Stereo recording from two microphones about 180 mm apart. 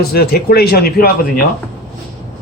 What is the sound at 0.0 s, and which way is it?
A man's voice, 60° left (ahead or behind).